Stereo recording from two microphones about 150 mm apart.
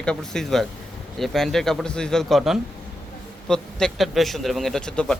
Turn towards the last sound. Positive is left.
turn(degrees=5)  # may be behind; listen again after turning